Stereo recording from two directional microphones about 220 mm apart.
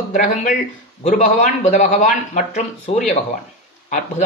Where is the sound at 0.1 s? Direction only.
35° left (ahead or behind).